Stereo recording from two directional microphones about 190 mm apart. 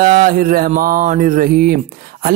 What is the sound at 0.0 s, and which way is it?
A man's voice, 50° right (ahead or behind).